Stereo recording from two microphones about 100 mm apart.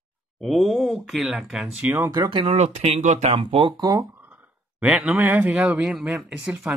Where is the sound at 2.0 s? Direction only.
40° right (ahead or behind).